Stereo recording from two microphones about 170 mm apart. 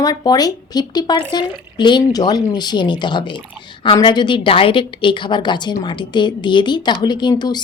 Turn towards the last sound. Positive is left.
turn(degrees=25)  # may be behind; listen again after turning